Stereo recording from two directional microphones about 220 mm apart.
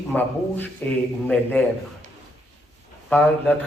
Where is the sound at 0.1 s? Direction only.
10° left (ahead or behind).